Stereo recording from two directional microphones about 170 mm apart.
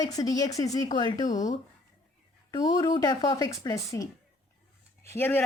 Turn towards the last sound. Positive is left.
turn(degrees=10)  # may be behind; listen again after turning